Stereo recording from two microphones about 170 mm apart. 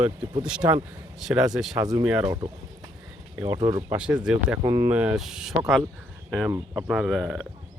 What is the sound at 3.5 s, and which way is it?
Speech, 20° right (ahead or behind).